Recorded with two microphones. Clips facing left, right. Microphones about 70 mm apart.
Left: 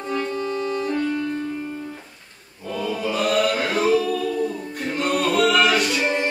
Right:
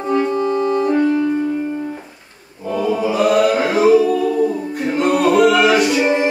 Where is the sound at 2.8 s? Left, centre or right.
Centre.